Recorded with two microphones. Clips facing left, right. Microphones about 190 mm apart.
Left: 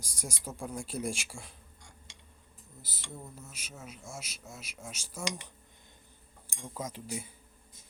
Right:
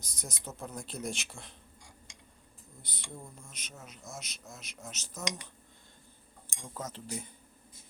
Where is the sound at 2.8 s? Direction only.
5° left (ahead or behind).